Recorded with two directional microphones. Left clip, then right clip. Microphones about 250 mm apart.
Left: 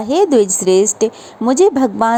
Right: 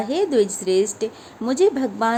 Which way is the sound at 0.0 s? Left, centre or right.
Left.